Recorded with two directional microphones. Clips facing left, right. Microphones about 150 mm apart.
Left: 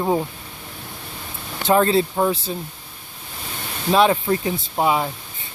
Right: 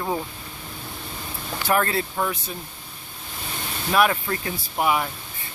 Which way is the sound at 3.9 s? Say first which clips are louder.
Left 5 dB; 25° left (ahead or behind).